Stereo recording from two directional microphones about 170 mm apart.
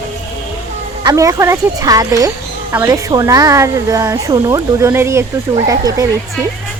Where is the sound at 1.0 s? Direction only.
20° right (ahead or behind).